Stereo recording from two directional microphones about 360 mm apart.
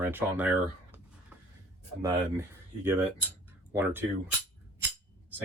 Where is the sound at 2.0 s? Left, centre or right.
Centre.